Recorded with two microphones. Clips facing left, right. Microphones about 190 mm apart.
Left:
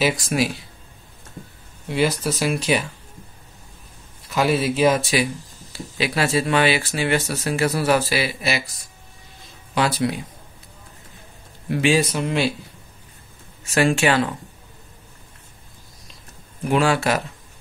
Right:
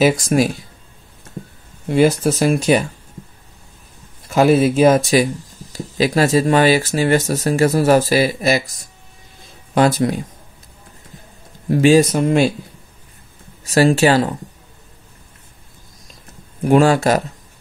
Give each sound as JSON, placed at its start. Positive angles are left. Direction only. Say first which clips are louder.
{"t": 0.0, "sound": "speech", "louder": "right 6 dB", "side_deg": -45}
{"t": 1.9, "sound": "speech", "louder": "right 7 dB", "side_deg": -50}
{"t": 4.3, "sound": "speech", "louder": "right 7 dB", "side_deg": -45}
{"t": 11.7, "sound": "speech", "louder": "right 7 dB", "side_deg": -40}
{"t": 13.7, "sound": "speech", "louder": "right 5 dB", "side_deg": -35}
{"t": 16.6, "sound": "speech", "louder": "right 6 dB", "side_deg": -45}